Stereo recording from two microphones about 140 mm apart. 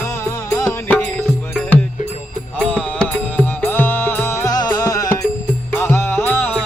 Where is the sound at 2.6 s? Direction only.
5° left (ahead or behind); by 5.1 s 25° left (ahead or behind).